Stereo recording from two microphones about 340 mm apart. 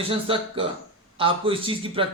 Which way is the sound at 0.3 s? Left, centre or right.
Centre.